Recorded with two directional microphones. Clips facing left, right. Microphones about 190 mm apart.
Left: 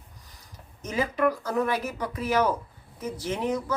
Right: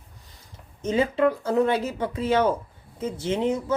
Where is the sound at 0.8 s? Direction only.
25° right (ahead or behind).